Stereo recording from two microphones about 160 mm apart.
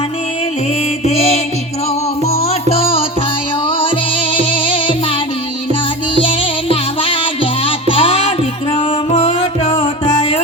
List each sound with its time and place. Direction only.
1.0 s music: 40° left (ahead or behind)
6.1 s music: 35° left (ahead or behind)